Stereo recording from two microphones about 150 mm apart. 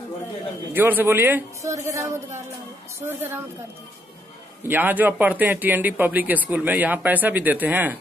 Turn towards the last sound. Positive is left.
turn(degrees=-10)  # may be behind; listen again after turning